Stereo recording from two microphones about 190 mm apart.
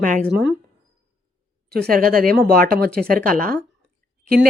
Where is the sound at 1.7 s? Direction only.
55° right (ahead or behind).